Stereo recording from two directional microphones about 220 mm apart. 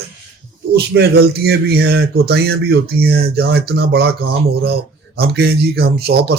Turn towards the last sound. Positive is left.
turn(degrees=-45)  # may be behind; listen again after turning